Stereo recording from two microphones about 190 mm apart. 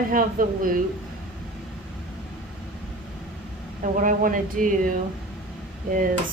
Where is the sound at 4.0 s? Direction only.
45° right (ahead or behind).